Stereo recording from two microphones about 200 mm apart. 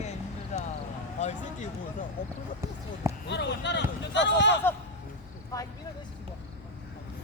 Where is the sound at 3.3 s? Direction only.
60° left (ahead or behind).